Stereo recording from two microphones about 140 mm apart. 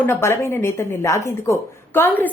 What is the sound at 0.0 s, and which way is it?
Speech, 15° left (ahead or behind).